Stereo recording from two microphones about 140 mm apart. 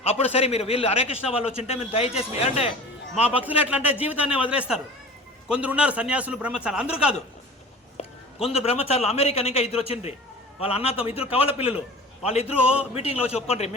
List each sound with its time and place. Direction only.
0.0 s a man's voice: 45° left (ahead or behind)
3.7 s a man's voice: 10° right (ahead or behind)
7.9 s a man's voice: 45° left (ahead or behind)